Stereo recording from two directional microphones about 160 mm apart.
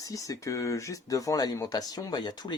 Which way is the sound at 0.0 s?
20° left (ahead or behind).